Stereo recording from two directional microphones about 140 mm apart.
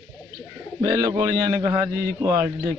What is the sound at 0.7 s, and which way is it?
Speech, 25° right (ahead or behind).